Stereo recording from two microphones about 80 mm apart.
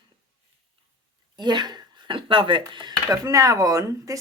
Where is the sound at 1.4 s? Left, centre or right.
Right.